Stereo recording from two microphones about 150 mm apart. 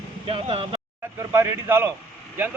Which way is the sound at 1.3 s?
15° right (ahead or behind).